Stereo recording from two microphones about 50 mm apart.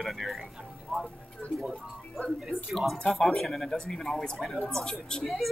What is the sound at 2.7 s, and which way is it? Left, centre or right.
Speech, centre.